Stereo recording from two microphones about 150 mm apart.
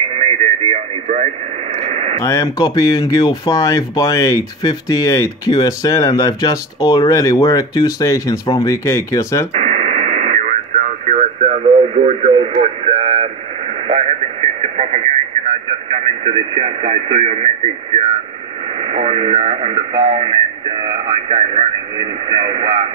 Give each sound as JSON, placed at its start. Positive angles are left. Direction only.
{"t": 0.1, "sound": "radio", "side_deg": -50}
{"t": 2.1, "sound": "speech", "side_deg": 20}
{"t": 9.5, "sound": "radio", "side_deg": -50}
{"t": 15.9, "sound": "speech", "side_deg": -45}